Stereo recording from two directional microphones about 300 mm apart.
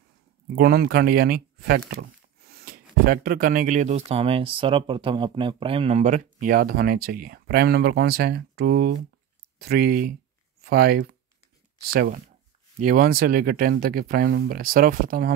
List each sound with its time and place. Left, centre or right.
0.6 s speech: right